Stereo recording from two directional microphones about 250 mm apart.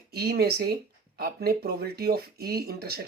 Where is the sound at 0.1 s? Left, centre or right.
Right.